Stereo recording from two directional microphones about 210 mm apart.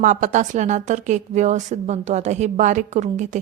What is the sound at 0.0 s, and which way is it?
A woman's voice, 40° right (ahead or behind).